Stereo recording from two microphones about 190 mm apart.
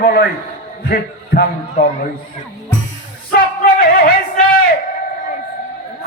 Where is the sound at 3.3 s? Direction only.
50° left (ahead or behind).